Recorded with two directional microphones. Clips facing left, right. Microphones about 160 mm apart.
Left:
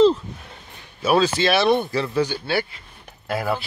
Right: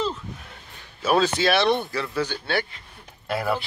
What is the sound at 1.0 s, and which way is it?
Speech, centre (ahead or behind).